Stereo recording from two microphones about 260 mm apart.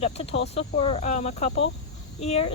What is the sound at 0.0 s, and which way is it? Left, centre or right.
Speech, left.